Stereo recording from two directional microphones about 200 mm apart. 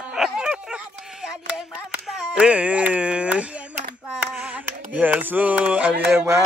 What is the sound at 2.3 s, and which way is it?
Speech, 5° right (ahead or behind).